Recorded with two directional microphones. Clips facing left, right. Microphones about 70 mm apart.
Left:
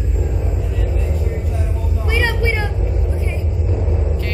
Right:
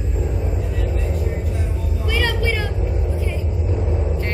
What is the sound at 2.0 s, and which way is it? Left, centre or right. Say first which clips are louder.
Vehicle: left 2 dB; left.